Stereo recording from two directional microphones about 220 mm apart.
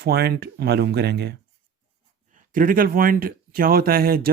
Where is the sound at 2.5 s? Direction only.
40° right (ahead or behind).